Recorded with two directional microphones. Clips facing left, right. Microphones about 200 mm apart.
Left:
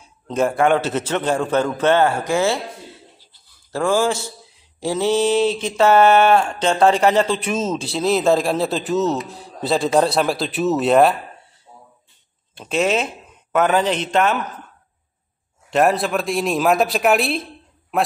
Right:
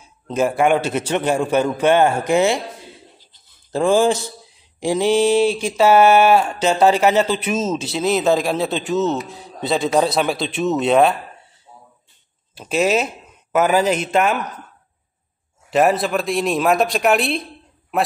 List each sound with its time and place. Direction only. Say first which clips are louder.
0.3 s a man's voice: even; 5° right (ahead or behind)
3.3 s a sound: right 3 dB; 20° right (ahead or behind)
4.7 s a man's voice: right 2 dB; 15° right (ahead or behind); by 11.1 s centre (ahead or behind)
12.5 s speech: right 1 dB; 5° right (ahead or behind)
15.7 s a man's voice: right 1 dB; centre (ahead or behind)